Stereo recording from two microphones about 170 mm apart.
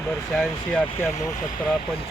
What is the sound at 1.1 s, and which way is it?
Speech, 45° left (ahead or behind).